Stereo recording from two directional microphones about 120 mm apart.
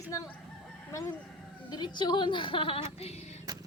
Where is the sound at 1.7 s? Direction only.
35° left (ahead or behind).